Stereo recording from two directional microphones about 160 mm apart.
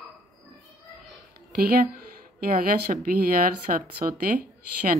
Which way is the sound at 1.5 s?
70° right (ahead or behind).